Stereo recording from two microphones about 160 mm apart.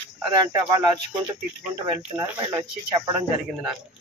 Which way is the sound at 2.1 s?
20° right (ahead or behind).